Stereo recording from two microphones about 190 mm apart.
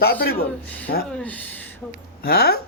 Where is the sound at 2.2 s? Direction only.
55° left (ahead or behind).